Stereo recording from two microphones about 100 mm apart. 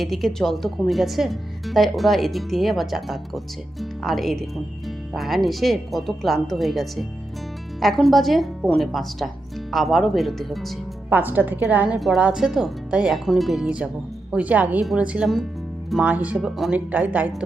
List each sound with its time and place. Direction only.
0.0 s speech: centre (ahead or behind)
11.1 s a woman's voice: 20° right (ahead or behind)
11.9 s a woman's voice: centre (ahead or behind)